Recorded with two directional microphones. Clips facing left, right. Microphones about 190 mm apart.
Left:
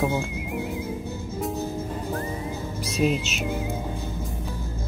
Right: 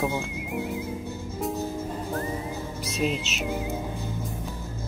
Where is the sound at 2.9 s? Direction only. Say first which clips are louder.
Left 4 dB; centre (ahead or behind).